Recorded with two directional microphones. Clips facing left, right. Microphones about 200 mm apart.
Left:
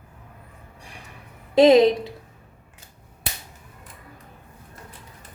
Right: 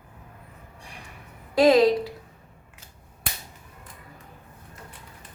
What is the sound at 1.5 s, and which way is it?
Speech, 20° left (ahead or behind).